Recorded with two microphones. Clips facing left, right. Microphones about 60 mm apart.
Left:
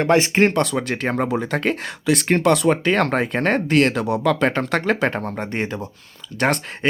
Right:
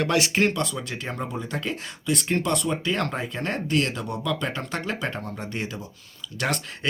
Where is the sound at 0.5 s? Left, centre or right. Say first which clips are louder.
Left 8 dB; left.